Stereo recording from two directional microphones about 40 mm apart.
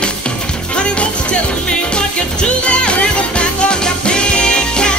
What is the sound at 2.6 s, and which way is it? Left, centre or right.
Music, left.